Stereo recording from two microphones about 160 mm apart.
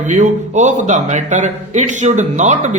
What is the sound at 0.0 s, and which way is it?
A man's voice, 50° right (ahead or behind).